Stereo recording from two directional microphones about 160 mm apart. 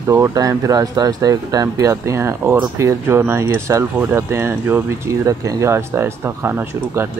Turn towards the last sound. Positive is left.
turn(degrees=-15)  # may be behind; listen again after turning